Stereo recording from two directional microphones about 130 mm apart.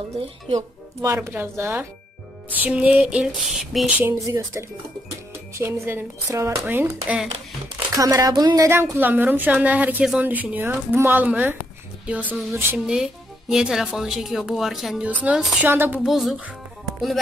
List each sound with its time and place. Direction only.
0.6 s a woman's voice: 25° right (ahead or behind); by 3.9 s 5° right (ahead or behind)
4.0 s speech: 15° right (ahead or behind)
7.9 s a woman's voice: 25° right (ahead or behind)
16.0 s speech: centre (ahead or behind)